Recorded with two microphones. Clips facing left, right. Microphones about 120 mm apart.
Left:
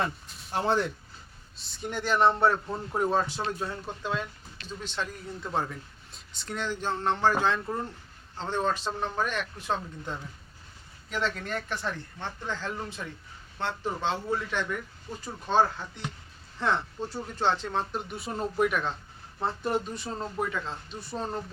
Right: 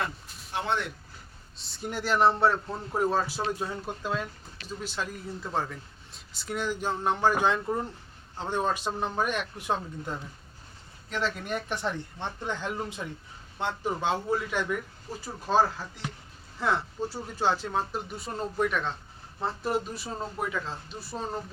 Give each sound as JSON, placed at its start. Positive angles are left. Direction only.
{"t": 0.5, "sound": "speech", "side_deg": 35}
{"t": 1.8, "sound": "a man's voice", "side_deg": 0}
{"t": 11.1, "sound": "a man's voice", "side_deg": -5}
{"t": 11.4, "sound": "a man's voice", "side_deg": -15}